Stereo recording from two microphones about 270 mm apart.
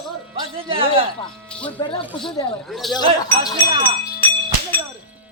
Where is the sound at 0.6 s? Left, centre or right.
Centre.